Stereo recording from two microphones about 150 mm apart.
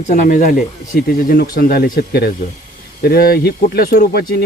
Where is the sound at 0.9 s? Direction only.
80° left.